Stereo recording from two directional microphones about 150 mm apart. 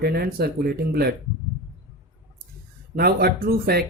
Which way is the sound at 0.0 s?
90° right.